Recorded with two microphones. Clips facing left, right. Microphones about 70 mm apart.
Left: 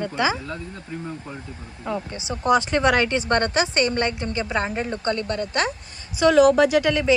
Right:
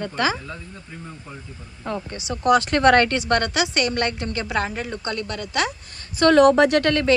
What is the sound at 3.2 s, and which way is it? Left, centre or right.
A woman's voice, left.